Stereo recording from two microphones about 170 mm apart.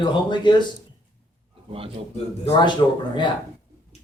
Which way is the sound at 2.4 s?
25° left (ahead or behind).